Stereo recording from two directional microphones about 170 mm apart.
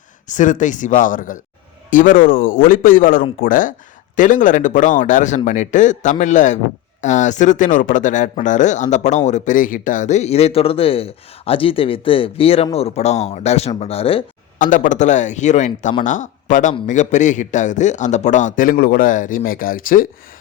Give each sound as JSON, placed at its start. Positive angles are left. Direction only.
{"t": 0.3, "sound": "a man's voice", "side_deg": 50}
{"t": 14.6, "sound": "a man's voice", "side_deg": 50}